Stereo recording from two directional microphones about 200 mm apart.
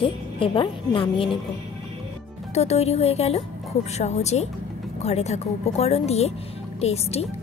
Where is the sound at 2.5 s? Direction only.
30° left (ahead or behind).